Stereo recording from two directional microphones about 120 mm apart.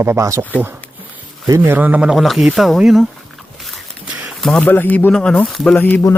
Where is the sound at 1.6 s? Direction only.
15° right (ahead or behind).